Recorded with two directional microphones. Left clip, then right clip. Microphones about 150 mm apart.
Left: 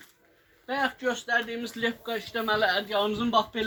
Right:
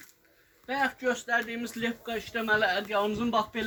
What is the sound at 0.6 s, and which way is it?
Speech, 40° right (ahead or behind).